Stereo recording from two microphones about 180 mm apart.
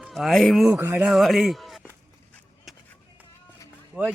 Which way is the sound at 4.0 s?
5° right (ahead or behind).